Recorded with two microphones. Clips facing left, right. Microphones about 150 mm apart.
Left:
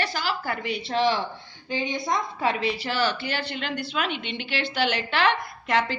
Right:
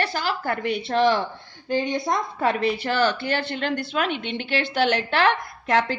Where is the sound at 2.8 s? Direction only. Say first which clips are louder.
Right 4 dB; 50° right (ahead or behind).